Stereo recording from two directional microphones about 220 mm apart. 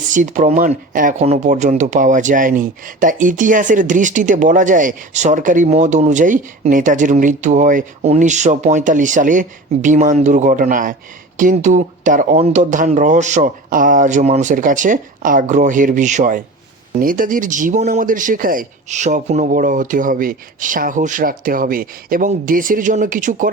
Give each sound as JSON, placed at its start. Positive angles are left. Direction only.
{"t": 0.0, "sound": "speech", "side_deg": -35}